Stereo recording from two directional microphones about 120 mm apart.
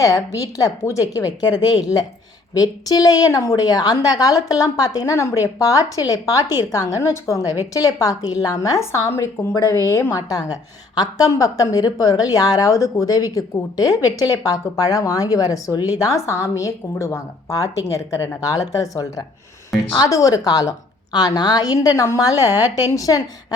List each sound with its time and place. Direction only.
0.0 s a woman's voice: 25° left (ahead or behind)